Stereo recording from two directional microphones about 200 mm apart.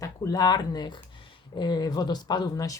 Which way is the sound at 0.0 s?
15° left (ahead or behind).